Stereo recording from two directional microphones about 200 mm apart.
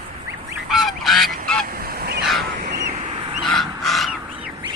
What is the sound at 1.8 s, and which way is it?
Goose, 50° right (ahead or behind).